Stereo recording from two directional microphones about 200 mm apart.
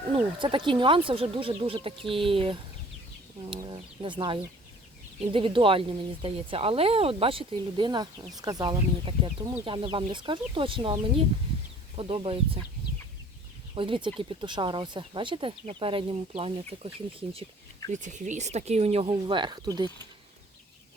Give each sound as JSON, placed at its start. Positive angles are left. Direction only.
{"t": 0.1, "sound": "speech", "side_deg": -25}
{"t": 13.7, "sound": "speech", "side_deg": -25}